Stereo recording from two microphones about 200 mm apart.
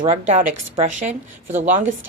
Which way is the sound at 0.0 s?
30° right (ahead or behind).